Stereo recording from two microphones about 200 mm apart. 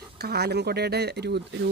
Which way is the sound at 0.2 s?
55° right (ahead or behind).